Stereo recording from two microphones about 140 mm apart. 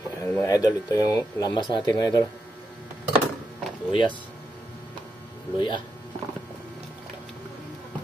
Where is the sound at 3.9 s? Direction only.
35° left (ahead or behind).